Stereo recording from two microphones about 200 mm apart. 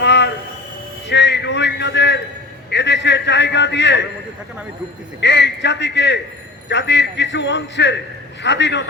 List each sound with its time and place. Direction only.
0.0 s a sound: 60° left (ahead or behind)
1.0 s a man's voice: 60° left (ahead or behind)
5.2 s a man's voice: 60° left (ahead or behind)